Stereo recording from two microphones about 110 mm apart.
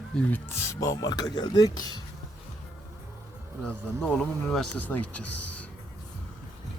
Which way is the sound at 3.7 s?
10° left (ahead or behind).